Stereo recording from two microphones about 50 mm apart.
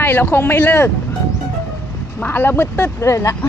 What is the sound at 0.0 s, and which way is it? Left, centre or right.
Speech, left.